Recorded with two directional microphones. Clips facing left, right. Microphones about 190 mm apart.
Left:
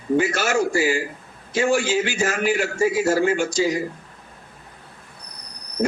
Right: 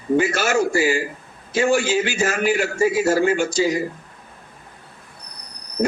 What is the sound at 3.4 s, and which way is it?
Speech, 5° right (ahead or behind).